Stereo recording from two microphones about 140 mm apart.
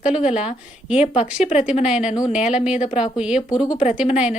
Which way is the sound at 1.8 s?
5° right (ahead or behind).